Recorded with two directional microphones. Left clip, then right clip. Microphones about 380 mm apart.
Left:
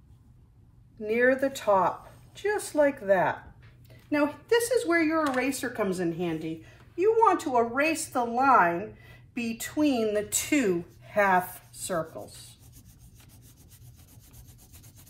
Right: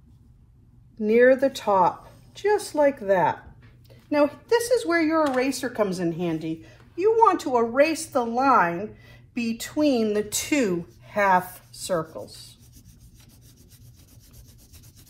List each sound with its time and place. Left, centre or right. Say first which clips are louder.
1.0 s a woman's voice: right 6 dB; centre
4.7 s a woman's voice: right 3 dB; centre